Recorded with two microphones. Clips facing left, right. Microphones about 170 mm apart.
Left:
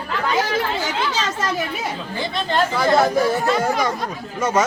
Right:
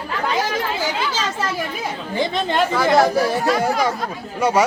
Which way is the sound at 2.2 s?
15° right (ahead or behind).